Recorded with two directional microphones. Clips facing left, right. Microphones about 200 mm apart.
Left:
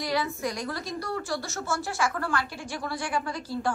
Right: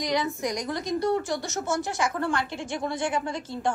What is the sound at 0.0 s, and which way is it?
A woman's voice, 20° right (ahead or behind).